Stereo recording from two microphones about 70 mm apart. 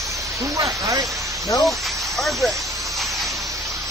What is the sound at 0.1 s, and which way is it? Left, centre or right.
Speech, right.